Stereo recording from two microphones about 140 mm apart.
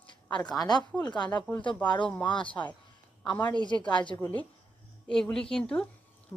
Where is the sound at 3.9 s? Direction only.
30° left (ahead or behind).